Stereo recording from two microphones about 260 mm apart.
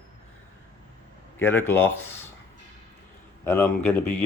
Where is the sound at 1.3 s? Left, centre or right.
Centre.